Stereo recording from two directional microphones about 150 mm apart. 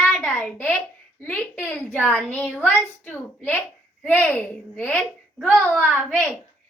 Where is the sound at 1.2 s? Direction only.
15° left (ahead or behind).